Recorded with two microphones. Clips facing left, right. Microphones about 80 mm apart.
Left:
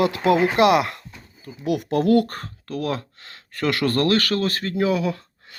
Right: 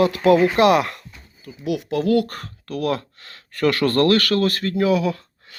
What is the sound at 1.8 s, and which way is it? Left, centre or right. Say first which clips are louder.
Speech: left 1 dB; left.